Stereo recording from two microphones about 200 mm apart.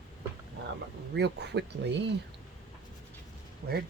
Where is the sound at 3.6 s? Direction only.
55° right (ahead or behind).